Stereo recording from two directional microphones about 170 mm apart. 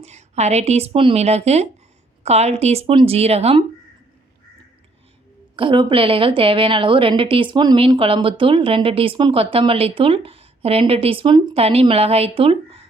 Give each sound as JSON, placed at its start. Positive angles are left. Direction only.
{"t": 0.0, "sound": "a woman's voice", "side_deg": -40}
{"t": 5.5, "sound": "a woman's voice", "side_deg": -30}